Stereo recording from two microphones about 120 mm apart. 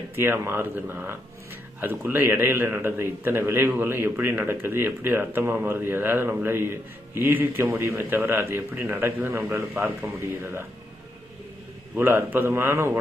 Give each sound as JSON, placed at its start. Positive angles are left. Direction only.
{"t": 0.2, "sound": "a man's voice", "side_deg": -20}
{"t": 11.9, "sound": "a man's voice", "side_deg": -15}